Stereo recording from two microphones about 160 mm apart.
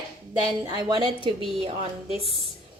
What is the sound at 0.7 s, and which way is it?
Speech, 25° right (ahead or behind).